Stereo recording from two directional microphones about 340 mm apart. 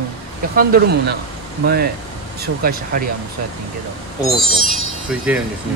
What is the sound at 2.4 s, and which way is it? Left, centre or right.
Speech, right.